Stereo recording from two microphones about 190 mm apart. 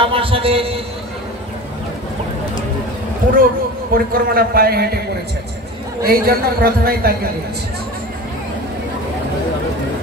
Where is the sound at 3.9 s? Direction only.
50° right (ahead or behind).